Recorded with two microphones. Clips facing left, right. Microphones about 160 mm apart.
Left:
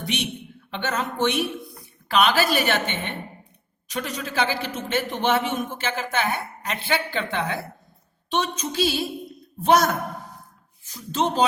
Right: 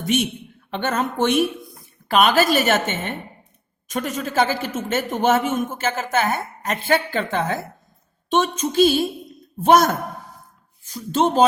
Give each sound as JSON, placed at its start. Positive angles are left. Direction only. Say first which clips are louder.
{"t": 0.0, "sound": "a woman's voice", "louder": "right 7 dB", "side_deg": -45}